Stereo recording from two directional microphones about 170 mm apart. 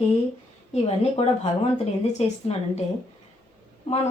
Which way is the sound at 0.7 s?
35° left (ahead or behind).